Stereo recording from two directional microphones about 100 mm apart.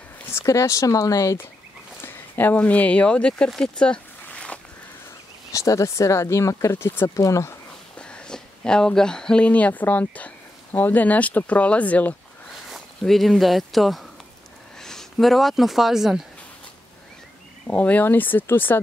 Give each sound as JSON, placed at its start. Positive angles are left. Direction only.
{"t": 0.3, "sound": "speech", "side_deg": 30}
{"t": 5.5, "sound": "speech", "side_deg": 35}
{"t": 8.0, "sound": "speech", "side_deg": 10}
{"t": 12.6, "sound": "speech", "side_deg": 0}
{"t": 17.6, "sound": "speech", "side_deg": 15}